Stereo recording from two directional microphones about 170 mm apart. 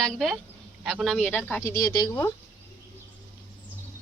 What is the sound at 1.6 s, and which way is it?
Speech, 20° left (ahead or behind).